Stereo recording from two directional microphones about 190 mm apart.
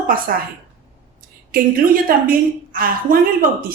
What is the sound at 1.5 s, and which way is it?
A woman's voice, 50° right (ahead or behind).